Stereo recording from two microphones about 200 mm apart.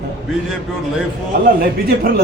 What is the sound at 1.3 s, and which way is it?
Speech, 45° right (ahead or behind).